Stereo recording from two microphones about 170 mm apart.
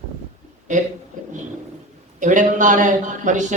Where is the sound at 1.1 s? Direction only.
45° right (ahead or behind).